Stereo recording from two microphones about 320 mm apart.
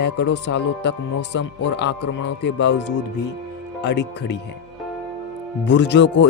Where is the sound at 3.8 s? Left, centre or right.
Left.